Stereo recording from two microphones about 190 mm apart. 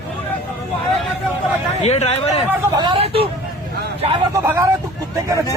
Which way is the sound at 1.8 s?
35° left (ahead or behind).